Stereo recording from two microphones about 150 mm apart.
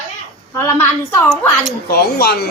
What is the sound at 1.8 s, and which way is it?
Speech, 90° left.